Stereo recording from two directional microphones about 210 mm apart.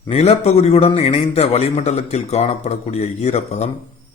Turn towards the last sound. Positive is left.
turn(degrees=30)  # may be behind; listen again after turning